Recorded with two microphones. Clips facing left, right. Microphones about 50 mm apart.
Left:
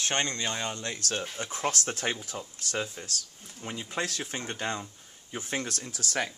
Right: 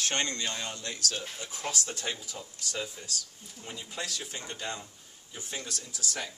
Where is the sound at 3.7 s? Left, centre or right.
Left.